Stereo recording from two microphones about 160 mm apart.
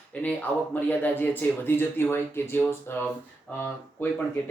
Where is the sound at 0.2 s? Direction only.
10° left (ahead or behind).